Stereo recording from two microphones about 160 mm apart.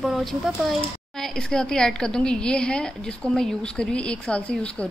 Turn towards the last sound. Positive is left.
turn(degrees=5)  # may be behind; listen again after turning